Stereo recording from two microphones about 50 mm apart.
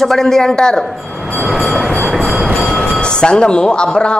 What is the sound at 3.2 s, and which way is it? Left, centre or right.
Speech, centre.